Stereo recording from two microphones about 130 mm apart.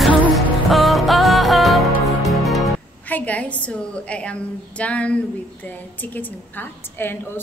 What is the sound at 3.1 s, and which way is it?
A woman's voice, 10° left (ahead or behind).